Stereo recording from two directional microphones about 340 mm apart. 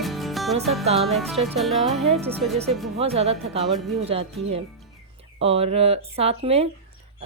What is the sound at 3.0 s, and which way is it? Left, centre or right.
A woman's voice, centre.